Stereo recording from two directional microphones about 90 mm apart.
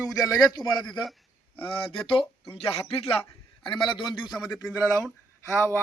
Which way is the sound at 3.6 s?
60° left (ahead or behind).